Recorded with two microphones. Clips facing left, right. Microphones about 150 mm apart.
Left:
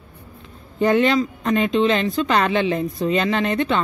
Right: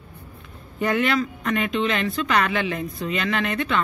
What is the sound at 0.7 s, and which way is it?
Speech, 25° left (ahead or behind).